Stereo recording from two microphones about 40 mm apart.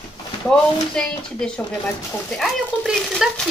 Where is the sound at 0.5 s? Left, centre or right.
Left.